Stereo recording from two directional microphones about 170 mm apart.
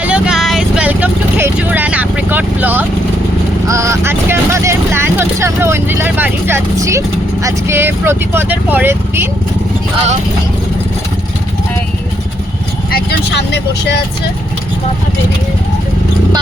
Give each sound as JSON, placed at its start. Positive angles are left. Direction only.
{"t": 0.0, "sound": "vehicle", "side_deg": -5}
{"t": 7.4, "sound": "speech", "side_deg": -15}
{"t": 12.9, "sound": "speech", "side_deg": 75}